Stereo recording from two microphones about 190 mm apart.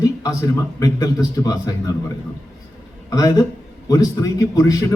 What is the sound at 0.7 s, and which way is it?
Speech, 20° left (ahead or behind).